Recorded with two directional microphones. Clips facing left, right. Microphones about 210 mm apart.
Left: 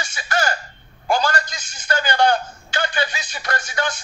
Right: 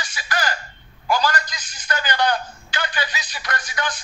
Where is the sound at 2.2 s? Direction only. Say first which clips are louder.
Left 4 dB; 45° left (ahead or behind).